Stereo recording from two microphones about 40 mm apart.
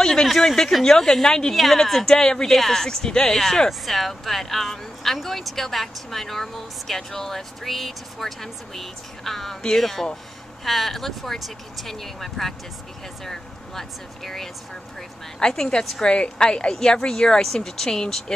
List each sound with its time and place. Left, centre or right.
0.0 s a sound: centre
0.3 s speech: centre
1.5 s a woman's voice: centre